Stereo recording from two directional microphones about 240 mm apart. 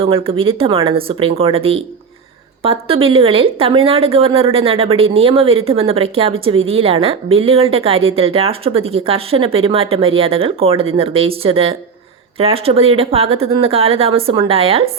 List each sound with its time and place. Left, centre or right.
0.0 s a woman's voice: right